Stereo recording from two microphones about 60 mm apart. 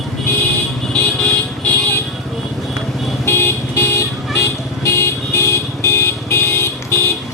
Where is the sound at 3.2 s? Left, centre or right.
Left.